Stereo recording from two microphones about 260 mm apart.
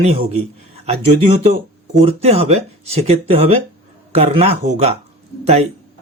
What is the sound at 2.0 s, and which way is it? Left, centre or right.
Speech, right.